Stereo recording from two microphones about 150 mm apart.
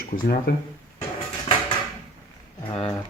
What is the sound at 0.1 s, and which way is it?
Speech, 90° left.